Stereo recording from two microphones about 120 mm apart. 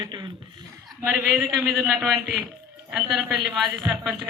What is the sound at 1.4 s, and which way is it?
Speech, 30° right (ahead or behind).